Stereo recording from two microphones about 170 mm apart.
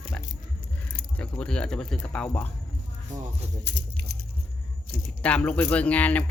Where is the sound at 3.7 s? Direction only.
90° right.